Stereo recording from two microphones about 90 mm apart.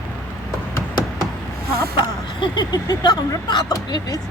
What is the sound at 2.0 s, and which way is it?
Speech, 55° left (ahead or behind).